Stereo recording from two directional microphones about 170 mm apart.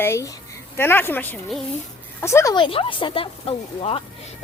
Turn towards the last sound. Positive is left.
turn(degrees=35)  # may be behind; listen again after turning